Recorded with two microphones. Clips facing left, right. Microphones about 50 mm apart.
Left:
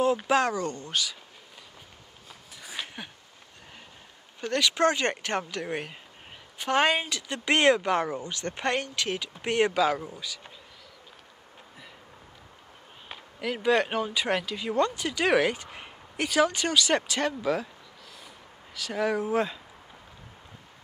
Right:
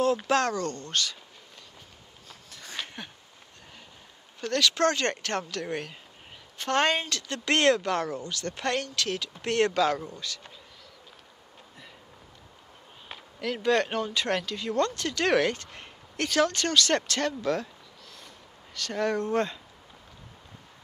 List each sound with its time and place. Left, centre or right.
0.0 s speech: centre
2.2 s a sound: centre
4.4 s speech: centre
13.1 s speech: centre
18.8 s speech: centre